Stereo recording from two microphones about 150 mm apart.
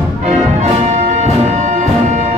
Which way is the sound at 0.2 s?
50° right (ahead or behind).